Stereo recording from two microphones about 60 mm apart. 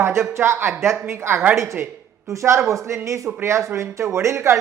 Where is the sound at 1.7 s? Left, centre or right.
Right.